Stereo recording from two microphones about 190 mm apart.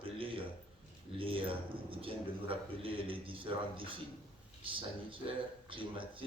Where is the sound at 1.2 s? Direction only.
30° right (ahead or behind).